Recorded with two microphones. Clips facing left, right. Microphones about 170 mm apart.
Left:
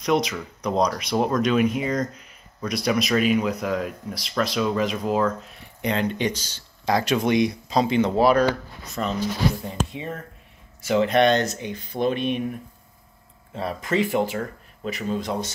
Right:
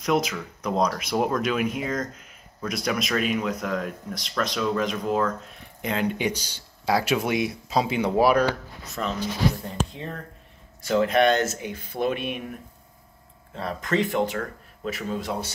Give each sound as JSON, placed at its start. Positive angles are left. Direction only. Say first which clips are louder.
{"t": 0.0, "sound": "speech", "louder": "left 2 dB", "side_deg": 0}
{"t": 9.0, "sound": "speech", "louder": "left 2 dB", "side_deg": 5}
{"t": 10.8, "sound": "speech", "louder": "left 1 dB", "side_deg": 0}
{"t": 13.6, "sound": "speech", "louder": "left 1 dB", "side_deg": 5}